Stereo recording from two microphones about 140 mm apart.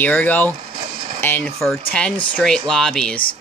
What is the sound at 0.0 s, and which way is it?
Speech, 10° left (ahead or behind).